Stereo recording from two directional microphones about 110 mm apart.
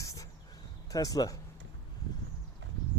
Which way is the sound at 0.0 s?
30° left (ahead or behind).